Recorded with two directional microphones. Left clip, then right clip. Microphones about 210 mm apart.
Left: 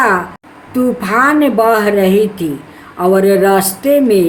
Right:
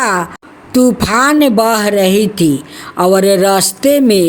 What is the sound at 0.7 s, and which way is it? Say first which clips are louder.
A woman's voice: right 3 dB; 55° right (ahead or behind).